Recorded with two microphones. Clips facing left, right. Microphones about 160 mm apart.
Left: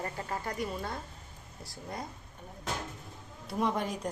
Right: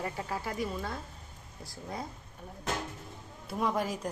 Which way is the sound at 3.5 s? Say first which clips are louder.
Even; centre (ahead or behind).